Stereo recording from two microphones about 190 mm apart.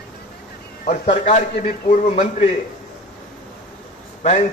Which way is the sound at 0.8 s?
40° left (ahead or behind).